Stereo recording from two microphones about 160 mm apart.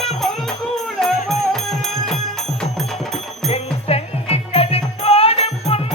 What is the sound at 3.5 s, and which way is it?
Music, 40° left (ahead or behind).